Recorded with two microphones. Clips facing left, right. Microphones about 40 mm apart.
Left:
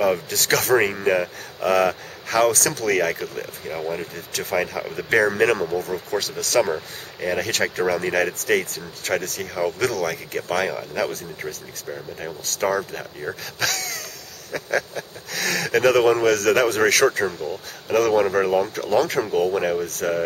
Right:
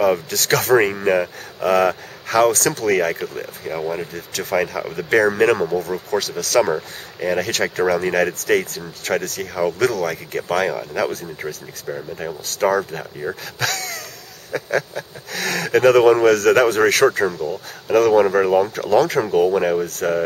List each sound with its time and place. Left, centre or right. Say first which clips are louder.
0.0 s speech: right 3 dB; centre